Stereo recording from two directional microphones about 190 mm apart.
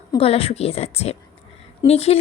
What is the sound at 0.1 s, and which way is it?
A woman's voice, 30° left (ahead or behind).